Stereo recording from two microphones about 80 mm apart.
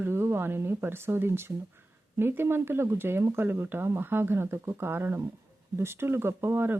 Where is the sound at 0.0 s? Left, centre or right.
Right.